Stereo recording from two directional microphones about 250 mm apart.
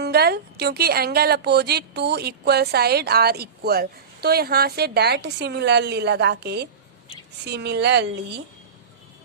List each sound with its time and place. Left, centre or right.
0.0 s a woman's voice: right